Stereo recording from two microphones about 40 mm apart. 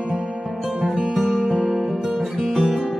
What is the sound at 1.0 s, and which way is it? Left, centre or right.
Music, centre.